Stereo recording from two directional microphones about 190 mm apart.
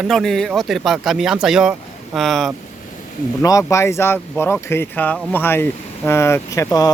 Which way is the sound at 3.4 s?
15° left (ahead or behind).